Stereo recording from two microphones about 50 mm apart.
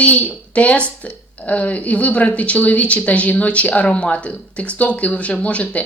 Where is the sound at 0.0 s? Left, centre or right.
Left.